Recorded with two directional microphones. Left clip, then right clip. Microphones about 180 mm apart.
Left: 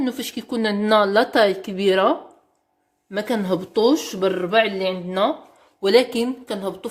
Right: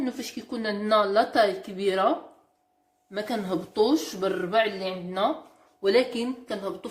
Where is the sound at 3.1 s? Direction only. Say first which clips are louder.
Left 6 dB; 75° left (ahead or behind).